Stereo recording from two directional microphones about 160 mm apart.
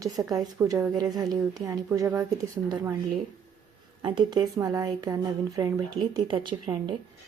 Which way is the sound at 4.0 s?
30° right (ahead or behind).